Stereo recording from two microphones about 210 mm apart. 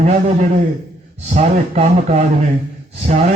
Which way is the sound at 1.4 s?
30° right (ahead or behind).